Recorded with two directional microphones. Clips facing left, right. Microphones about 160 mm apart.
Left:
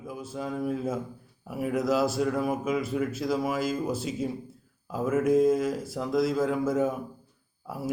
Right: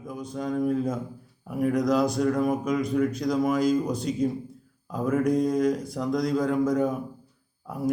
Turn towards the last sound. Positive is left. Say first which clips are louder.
# right 5 dB
turn(degrees=5)  # may be behind; listen again after turning